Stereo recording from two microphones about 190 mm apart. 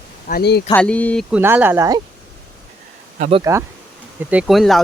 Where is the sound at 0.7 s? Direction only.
5° left (ahead or behind).